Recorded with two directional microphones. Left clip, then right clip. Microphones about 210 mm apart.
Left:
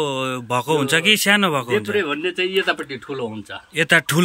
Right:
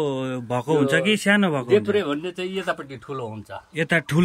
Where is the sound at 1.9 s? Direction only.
35° right (ahead or behind).